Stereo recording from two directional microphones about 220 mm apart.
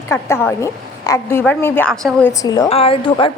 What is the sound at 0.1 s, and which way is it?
A woman's voice, 10° left (ahead or behind).